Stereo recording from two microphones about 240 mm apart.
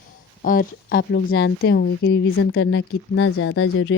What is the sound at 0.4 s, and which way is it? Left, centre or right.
Speech, left.